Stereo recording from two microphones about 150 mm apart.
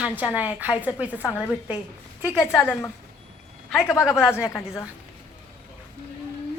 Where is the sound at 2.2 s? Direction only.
20° left (ahead or behind).